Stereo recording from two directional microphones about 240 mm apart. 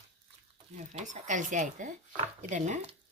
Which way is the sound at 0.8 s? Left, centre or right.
Right.